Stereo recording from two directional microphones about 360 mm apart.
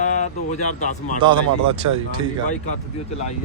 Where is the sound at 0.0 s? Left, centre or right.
Centre.